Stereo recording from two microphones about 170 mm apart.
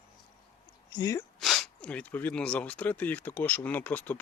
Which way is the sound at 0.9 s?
20° left (ahead or behind).